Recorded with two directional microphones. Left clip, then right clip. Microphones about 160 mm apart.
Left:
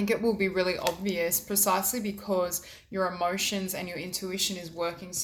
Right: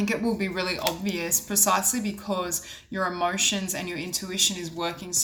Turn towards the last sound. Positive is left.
turn(degrees=25)  # may be behind; listen again after turning